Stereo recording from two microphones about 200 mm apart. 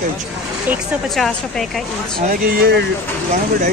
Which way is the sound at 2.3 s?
50° right (ahead or behind).